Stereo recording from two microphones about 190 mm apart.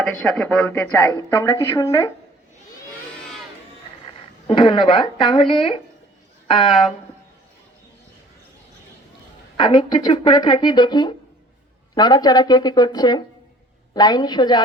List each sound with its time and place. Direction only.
0.0 s speech: centre (ahead or behind)
4.4 s speech: 25° left (ahead or behind)
9.6 s speech: 25° left (ahead or behind)